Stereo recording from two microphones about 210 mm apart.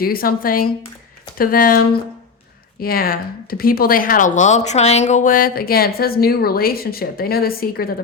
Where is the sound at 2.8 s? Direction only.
45° left (ahead or behind).